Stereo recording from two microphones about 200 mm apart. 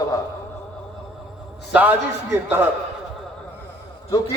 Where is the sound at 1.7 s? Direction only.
10° right (ahead or behind).